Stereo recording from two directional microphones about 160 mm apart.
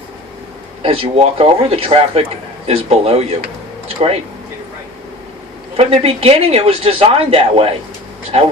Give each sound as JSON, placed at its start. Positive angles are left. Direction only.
{"t": 0.8, "sound": "speech", "side_deg": -35}
{"t": 5.7, "sound": "speech", "side_deg": -35}